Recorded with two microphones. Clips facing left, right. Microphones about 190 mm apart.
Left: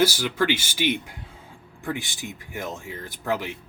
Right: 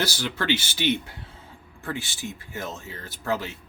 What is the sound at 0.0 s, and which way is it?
Speech, 10° left (ahead or behind).